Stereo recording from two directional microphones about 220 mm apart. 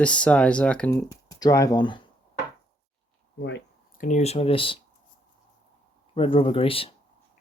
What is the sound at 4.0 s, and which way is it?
Speech, 30° left (ahead or behind).